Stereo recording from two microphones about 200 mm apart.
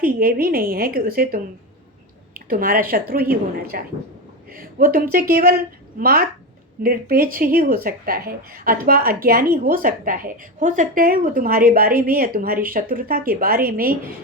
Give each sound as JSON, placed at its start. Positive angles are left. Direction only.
{"t": 0.0, "sound": "speech", "side_deg": -45}